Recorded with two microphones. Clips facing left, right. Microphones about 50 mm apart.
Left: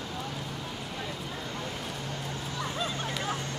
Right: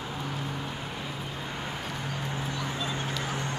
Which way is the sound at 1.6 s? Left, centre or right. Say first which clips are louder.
Right 1 dB; centre.